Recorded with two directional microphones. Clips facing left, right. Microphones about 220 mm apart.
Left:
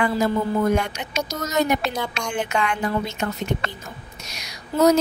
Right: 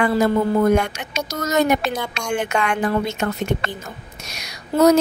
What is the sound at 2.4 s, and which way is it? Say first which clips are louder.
Speech: right 1 dB; 65° right (ahead or behind).